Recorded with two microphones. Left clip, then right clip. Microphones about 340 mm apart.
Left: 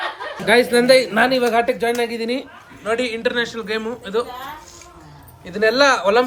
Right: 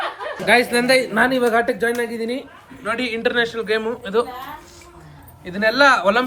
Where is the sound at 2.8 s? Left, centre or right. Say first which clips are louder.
Left 1 dB; centre.